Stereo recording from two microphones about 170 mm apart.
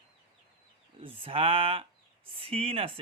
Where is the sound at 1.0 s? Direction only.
35° right (ahead or behind).